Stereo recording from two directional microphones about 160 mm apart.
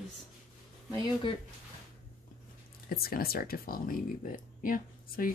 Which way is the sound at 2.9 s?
70° left (ahead or behind).